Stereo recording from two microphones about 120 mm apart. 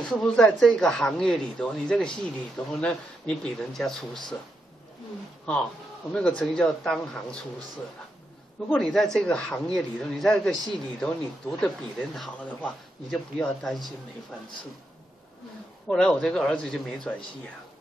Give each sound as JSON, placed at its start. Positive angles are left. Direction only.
{"t": 0.0, "sound": "speech", "side_deg": 5}
{"t": 6.1, "sound": "speech", "side_deg": 5}
{"t": 8.6, "sound": "speech", "side_deg": 5}
{"t": 15.9, "sound": "speech", "side_deg": 5}